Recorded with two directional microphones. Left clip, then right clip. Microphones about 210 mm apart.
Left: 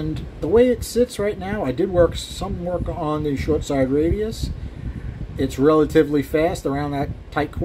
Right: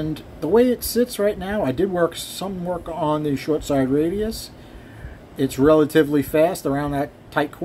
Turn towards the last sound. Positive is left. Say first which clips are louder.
# right 1 dB
turn(degrees=-10)  # may be behind; listen again after turning